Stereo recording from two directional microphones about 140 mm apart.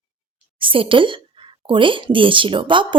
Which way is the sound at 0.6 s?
40° right (ahead or behind).